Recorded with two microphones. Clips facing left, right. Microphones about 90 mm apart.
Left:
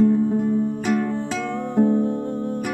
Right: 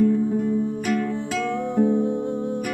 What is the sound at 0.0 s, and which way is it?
Music, 25° left (ahead or behind).